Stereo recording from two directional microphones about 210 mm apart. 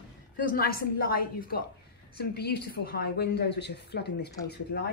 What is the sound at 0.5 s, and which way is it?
A woman's voice, 45° left (ahead or behind).